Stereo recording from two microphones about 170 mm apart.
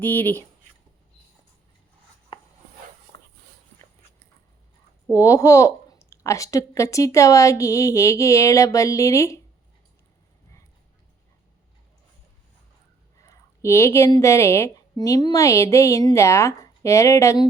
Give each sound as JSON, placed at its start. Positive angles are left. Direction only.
{"t": 0.0, "sound": "speech", "side_deg": 10}
{"t": 5.1, "sound": "speech", "side_deg": 20}
{"t": 13.2, "sound": "speech", "side_deg": 15}